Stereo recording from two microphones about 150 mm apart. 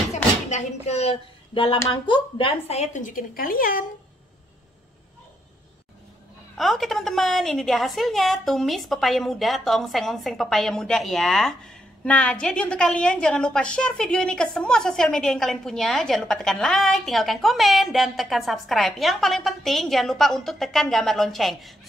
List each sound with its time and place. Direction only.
0.1 s a sound: 50° left (ahead or behind)
1.9 s a woman's voice: 35° left (ahead or behind); by 3.8 s 70° left (ahead or behind)
6.5 s a woman's voice: centre (ahead or behind)